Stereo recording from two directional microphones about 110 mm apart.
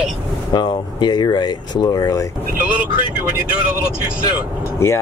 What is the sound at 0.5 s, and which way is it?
Speech, 40° left (ahead or behind).